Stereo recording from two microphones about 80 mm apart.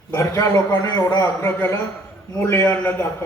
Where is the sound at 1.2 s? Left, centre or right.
Left.